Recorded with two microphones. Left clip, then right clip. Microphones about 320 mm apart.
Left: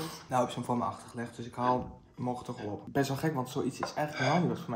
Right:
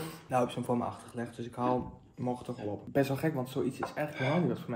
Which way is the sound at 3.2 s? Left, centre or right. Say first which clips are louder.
Even; centre.